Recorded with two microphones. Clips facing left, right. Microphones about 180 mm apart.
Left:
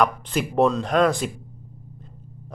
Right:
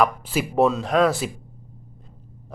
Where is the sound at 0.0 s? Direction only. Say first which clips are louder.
Right 1 dB; 5° right (ahead or behind).